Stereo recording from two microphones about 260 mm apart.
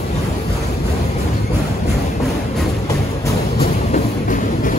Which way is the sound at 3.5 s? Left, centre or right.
Left.